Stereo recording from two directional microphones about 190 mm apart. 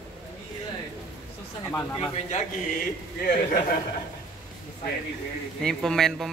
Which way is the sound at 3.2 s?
50° left (ahead or behind).